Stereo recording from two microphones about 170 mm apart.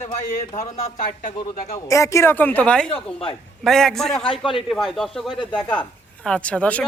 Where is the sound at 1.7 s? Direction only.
20° left (ahead or behind).